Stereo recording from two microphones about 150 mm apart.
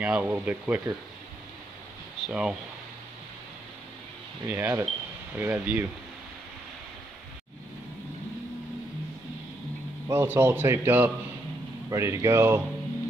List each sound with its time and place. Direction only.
0.0 s a man's voice: 10° right (ahead or behind)
2.2 s speech: 5° right (ahead or behind)
4.5 s a man's voice: 15° right (ahead or behind)
10.0 s a man's voice: 15° right (ahead or behind)